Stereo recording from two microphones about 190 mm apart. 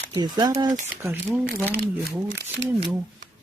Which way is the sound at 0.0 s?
20° right (ahead or behind).